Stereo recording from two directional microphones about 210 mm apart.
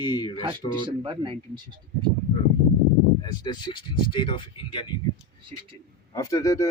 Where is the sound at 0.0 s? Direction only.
20° left (ahead or behind).